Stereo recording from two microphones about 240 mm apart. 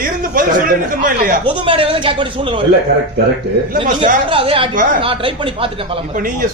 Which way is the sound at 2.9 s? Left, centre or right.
Right.